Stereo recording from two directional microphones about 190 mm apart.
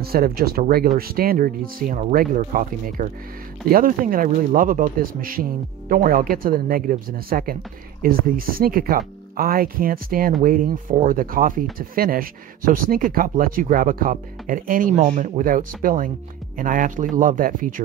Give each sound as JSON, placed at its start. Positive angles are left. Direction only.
{"t": 0.0, "sound": "speech", "side_deg": -55}